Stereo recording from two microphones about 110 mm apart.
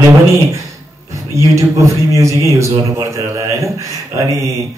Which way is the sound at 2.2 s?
30° right (ahead or behind).